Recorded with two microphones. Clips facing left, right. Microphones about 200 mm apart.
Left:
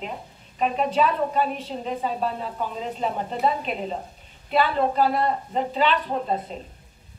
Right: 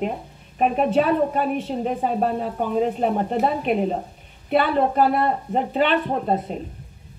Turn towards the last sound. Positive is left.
turn(degrees=-55)  # may be behind; listen again after turning